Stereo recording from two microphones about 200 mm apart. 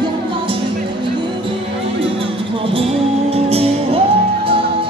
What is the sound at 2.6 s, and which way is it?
Music, 30° right (ahead or behind).